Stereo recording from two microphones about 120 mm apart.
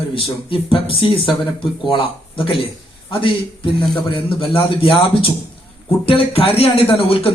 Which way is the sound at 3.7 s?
45° left (ahead or behind).